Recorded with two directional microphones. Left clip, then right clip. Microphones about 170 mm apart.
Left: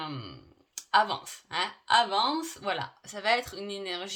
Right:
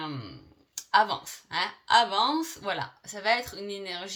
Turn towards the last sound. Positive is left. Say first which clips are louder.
# even
turn(degrees=40)  # may be behind; listen again after turning